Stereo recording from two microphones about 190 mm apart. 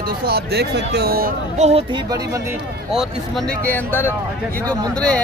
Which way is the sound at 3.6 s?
10° left (ahead or behind).